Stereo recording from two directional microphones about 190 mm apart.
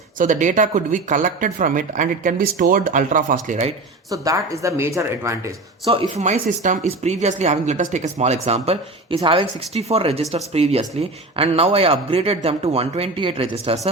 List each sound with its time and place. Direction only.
0.2 s speech: 40° right (ahead or behind)
4.1 s speech: 20° right (ahead or behind)
5.9 s speech: 30° right (ahead or behind)